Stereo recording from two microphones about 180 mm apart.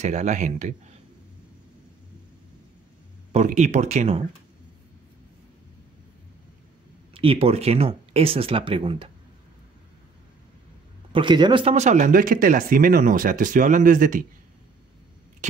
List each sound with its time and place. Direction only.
0.0 s speech: 40° right (ahead or behind)
3.3 s speech: 40° right (ahead or behind)
7.2 s speech: 30° right (ahead or behind)
11.1 s speech: 25° right (ahead or behind); by 14.2 s 50° right (ahead or behind)